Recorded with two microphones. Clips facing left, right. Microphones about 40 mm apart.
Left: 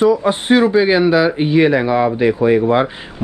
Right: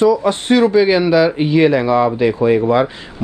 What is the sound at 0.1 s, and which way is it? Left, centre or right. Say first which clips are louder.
Speech: even; centre.